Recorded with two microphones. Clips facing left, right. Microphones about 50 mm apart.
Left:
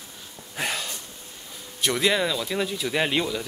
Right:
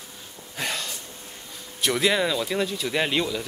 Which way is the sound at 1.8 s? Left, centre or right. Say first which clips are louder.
Right 1 dB; centre.